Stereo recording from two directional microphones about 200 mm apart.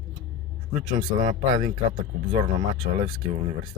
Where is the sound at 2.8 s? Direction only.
20° right (ahead or behind).